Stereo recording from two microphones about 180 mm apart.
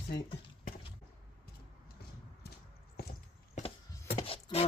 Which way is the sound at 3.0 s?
60° left (ahead or behind).